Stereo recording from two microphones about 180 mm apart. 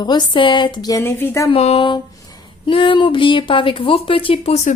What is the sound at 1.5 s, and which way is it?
Speech, 35° left (ahead or behind).